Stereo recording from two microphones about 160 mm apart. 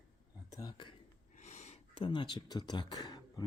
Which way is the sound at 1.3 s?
45° left (ahead or behind).